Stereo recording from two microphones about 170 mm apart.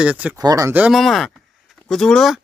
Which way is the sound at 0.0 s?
10° right (ahead or behind).